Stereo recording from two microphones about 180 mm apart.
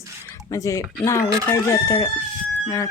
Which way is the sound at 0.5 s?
15° left (ahead or behind).